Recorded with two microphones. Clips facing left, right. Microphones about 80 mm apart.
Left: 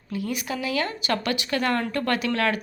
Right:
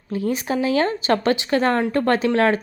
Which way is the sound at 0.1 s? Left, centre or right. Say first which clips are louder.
Right 6 dB; right.